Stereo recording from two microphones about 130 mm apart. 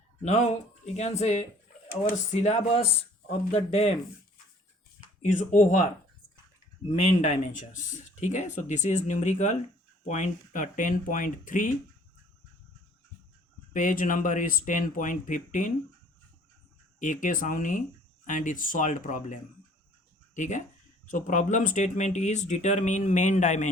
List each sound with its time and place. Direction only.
0.2 s speech: 60° left (ahead or behind)
4.9 s speech: 70° left (ahead or behind)
6.8 s speech: 60° left (ahead or behind); by 11.7 s 90° left
13.7 s speech: 90° left
17.0 s speech: 80° left
20.3 s speech: 70° left (ahead or behind)